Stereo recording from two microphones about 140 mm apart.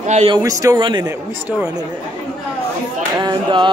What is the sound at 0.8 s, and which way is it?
Music, 30° right (ahead or behind).